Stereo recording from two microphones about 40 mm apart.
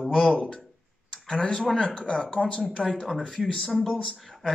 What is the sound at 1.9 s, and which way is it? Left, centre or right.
Speech, left.